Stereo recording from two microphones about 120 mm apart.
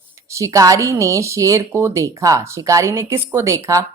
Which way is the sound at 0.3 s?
25° right (ahead or behind).